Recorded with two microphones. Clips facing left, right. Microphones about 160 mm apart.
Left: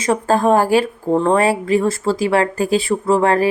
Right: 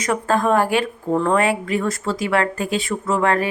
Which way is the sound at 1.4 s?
35° left (ahead or behind).